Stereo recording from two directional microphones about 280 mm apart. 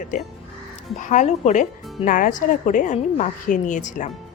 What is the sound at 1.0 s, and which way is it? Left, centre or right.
Speech, left.